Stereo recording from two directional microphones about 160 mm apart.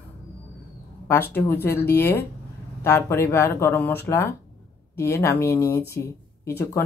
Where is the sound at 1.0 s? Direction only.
15° left (ahead or behind).